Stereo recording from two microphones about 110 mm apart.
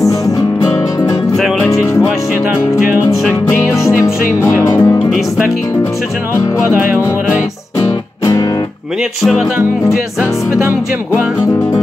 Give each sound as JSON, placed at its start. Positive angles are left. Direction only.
{"t": 0.6, "sound": "music", "side_deg": 35}
{"t": 1.3, "sound": "music", "side_deg": 0}
{"t": 1.7, "sound": "music", "side_deg": 30}
{"t": 3.7, "sound": "music", "side_deg": 25}